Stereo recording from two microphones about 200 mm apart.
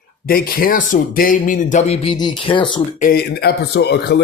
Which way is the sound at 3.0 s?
50° left (ahead or behind).